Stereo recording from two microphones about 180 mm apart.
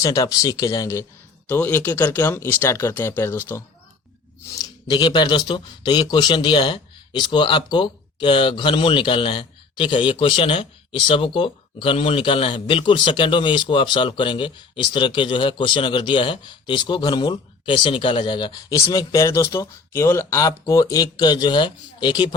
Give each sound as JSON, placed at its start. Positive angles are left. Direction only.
{"t": 0.0, "sound": "speech", "side_deg": 20}
{"t": 4.5, "sound": "speech", "side_deg": 25}